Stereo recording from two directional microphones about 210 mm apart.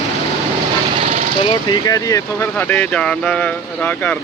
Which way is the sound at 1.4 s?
20° left (ahead or behind).